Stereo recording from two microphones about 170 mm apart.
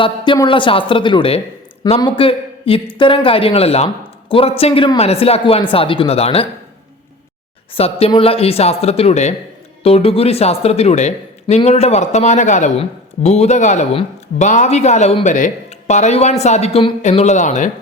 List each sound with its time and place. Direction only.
0.3 s a man's voice: 30° left (ahead or behind)
7.7 s speech: 35° left (ahead or behind)